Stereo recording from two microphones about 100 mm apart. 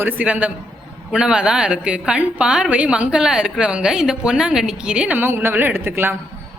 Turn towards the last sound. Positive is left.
turn(degrees=-20)  # may be behind; listen again after turning